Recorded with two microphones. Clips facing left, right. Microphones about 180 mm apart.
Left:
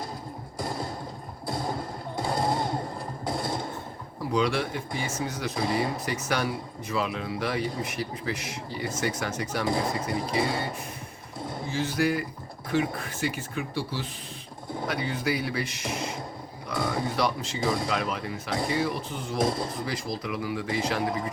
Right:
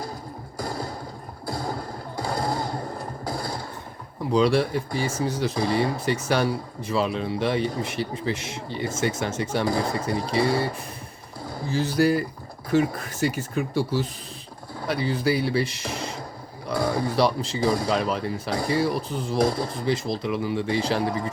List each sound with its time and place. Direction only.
0.6 s a sound: centre (ahead or behind)
4.3 s speech: 35° right (ahead or behind)
10.3 s speech: centre (ahead or behind)
11.7 s speech: 35° right (ahead or behind)
14.8 s speech: 30° right (ahead or behind)
16.7 s a sound: centre (ahead or behind)
17.2 s speech: 30° right (ahead or behind)
17.6 s speech: centre (ahead or behind)
17.8 s speech: 35° right (ahead or behind)
19.4 s speech: centre (ahead or behind)
19.7 s speech: 25° right (ahead or behind)